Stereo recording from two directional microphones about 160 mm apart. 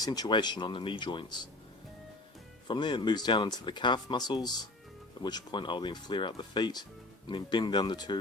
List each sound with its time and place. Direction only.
0.0 s speech: 25° left (ahead or behind)
2.6 s speech: 30° left (ahead or behind)